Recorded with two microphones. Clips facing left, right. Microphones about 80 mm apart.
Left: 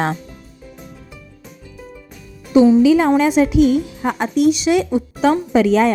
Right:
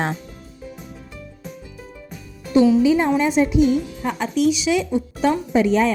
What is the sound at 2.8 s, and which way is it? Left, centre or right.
A woman's voice, left.